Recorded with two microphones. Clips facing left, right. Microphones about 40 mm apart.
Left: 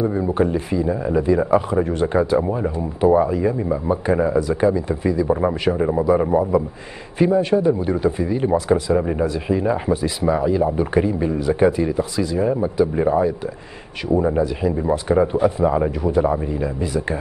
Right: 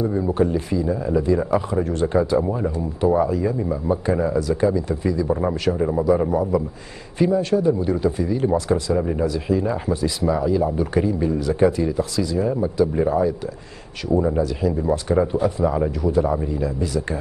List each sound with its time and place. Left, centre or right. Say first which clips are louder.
0.0 s speech: left 1 dB; centre